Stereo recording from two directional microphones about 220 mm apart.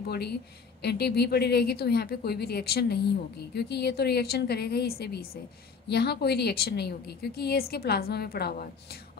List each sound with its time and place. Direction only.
0.0 s a woman's voice: 45° left (ahead or behind)